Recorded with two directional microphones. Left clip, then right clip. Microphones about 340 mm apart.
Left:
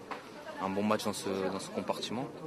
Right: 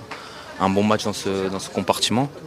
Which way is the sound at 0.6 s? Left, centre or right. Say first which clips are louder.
Right 12 dB; right.